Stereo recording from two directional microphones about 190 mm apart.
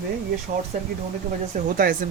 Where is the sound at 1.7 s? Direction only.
50° right (ahead or behind).